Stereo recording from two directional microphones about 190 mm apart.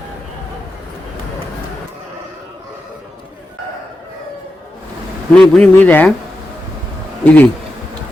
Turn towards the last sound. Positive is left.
turn(degrees=10)  # may be behind; listen again after turning